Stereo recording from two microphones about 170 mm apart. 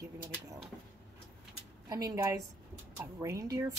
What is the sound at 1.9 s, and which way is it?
A woman's voice, 20° right (ahead or behind).